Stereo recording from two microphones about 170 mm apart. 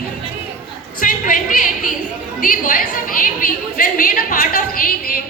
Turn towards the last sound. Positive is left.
turn(degrees=55)  # may be behind; listen again after turning